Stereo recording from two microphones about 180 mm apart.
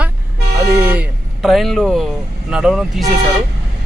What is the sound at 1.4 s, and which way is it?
Speech, centre (ahead or behind).